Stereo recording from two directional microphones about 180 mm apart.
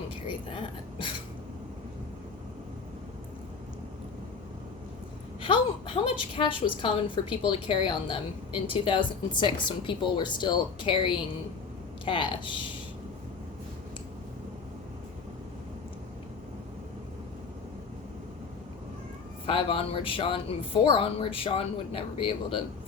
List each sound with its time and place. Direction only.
0.3 s speech: 30° left (ahead or behind)
5.4 s speech: 30° left (ahead or behind)
19.5 s a woman's voice: 30° left (ahead or behind)